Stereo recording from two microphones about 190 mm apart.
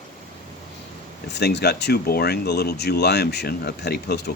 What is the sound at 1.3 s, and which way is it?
Speech, 60° left (ahead or behind).